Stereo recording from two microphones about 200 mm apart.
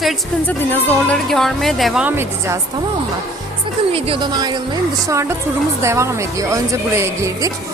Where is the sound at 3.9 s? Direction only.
25° right (ahead or behind).